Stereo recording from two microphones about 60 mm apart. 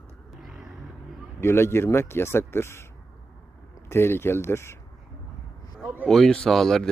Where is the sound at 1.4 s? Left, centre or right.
Left.